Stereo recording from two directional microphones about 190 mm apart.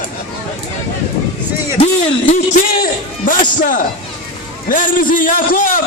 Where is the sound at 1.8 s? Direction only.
40° left (ahead or behind).